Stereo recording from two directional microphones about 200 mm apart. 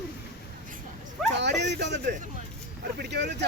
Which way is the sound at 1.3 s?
60° right (ahead or behind).